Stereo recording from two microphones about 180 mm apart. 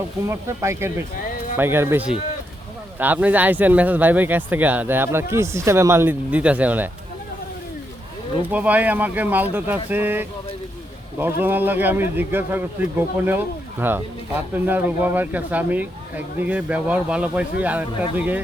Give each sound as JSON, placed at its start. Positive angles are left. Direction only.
{"t": 0.3, "sound": "speech", "side_deg": -15}
{"t": 8.4, "sound": "speech", "side_deg": -10}